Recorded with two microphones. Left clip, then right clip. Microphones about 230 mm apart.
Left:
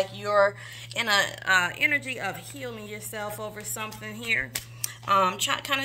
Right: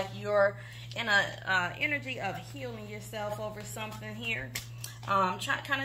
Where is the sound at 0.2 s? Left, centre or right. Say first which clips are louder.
Left 4 dB; left.